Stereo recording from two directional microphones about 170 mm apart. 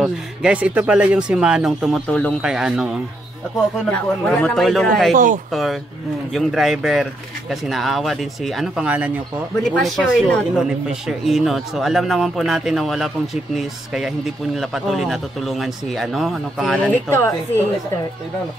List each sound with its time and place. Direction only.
0.0 s a man's voice: 5° right (ahead or behind)
5.1 s speech: 50° right (ahead or behind)
5.5 s a man's voice: centre (ahead or behind)